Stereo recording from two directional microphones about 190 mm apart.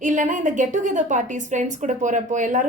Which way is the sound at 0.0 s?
40° right (ahead or behind).